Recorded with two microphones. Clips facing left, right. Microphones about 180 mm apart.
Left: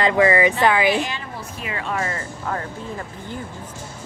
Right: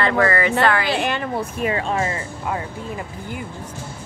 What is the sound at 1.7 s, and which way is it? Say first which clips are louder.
Speech: right 2 dB; 30° right (ahead or behind).